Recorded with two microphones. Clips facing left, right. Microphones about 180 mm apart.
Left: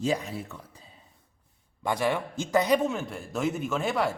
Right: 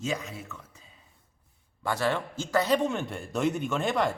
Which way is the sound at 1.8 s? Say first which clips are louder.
Left 1 dB; 15° left (ahead or behind).